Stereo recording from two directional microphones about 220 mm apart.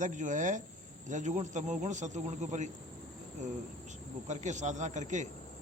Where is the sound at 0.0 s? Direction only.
35° right (ahead or behind).